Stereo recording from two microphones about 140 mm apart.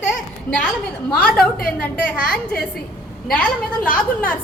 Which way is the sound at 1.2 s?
5° left (ahead or behind).